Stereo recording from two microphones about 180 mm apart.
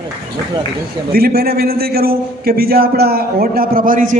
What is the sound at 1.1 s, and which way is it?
A man's voice, 60° right (ahead or behind).